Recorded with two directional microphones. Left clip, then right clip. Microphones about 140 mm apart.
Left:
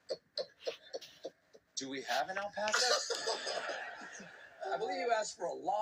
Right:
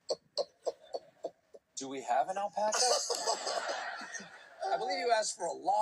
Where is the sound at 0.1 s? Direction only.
50° right (ahead or behind).